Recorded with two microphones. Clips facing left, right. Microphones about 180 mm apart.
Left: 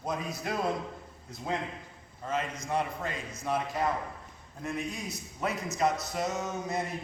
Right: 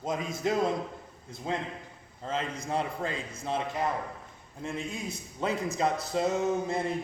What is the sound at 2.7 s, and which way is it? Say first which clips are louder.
Speech: right 1 dB; 30° right (ahead or behind).